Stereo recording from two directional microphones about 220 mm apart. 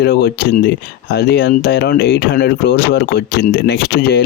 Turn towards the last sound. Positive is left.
turn(degrees=50)  # may be behind; listen again after turning